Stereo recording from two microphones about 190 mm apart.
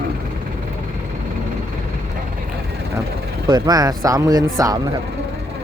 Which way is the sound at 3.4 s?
20° right (ahead or behind).